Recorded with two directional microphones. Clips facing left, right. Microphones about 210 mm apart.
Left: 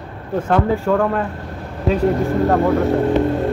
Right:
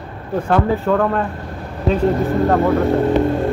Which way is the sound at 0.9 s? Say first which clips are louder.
Even; 15° left (ahead or behind).